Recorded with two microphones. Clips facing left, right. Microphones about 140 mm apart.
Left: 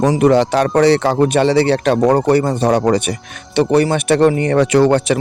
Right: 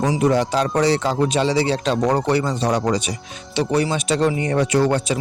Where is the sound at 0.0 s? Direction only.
65° left (ahead or behind).